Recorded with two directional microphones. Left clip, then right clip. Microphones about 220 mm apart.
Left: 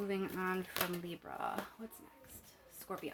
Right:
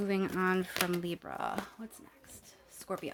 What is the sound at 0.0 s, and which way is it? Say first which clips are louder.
Speech: right 6 dB; 45° right (ahead or behind).